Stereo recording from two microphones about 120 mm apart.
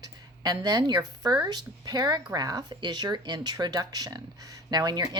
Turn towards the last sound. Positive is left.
turn(degrees=-35)  # may be behind; listen again after turning